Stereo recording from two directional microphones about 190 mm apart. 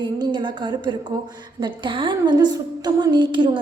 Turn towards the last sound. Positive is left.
turn(degrees=-25)  # may be behind; listen again after turning